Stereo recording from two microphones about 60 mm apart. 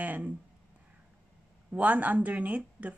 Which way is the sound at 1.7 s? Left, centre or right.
Right.